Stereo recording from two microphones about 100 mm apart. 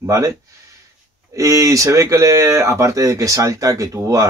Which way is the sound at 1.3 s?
35° right (ahead or behind).